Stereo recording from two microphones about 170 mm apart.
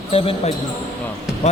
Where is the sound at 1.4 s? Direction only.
40° left (ahead or behind).